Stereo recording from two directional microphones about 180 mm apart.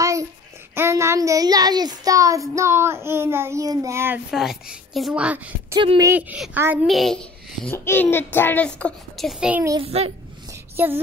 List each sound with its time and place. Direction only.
0.0 s babbling: 20° right (ahead or behind)
0.7 s a child's voice: 15° right (ahead or behind)
4.3 s a woman's voice: centre (ahead or behind)
5.8 s speech: 25° right (ahead or behind)
6.1 s a child's voice: 5° right (ahead or behind)
6.9 s a child's voice: centre (ahead or behind)
9.7 s a child's voice: 30° right (ahead or behind)
10.5 s a sound: 10° right (ahead or behind)